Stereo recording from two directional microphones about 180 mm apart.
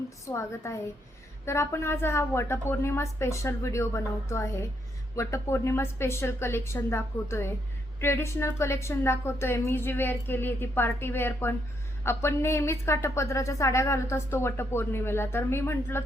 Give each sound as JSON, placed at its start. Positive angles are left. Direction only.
{"t": 0.3, "sound": "a woman's voice", "side_deg": 15}